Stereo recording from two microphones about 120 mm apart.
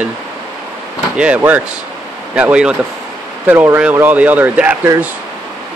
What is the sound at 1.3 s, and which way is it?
Speech, 15° right (ahead or behind).